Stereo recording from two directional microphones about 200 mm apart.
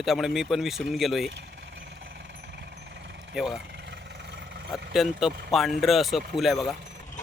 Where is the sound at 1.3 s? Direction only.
65° right (ahead or behind).